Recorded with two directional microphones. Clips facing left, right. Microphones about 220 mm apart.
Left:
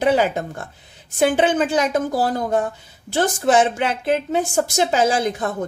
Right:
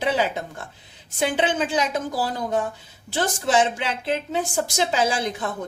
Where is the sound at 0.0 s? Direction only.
50° left (ahead or behind).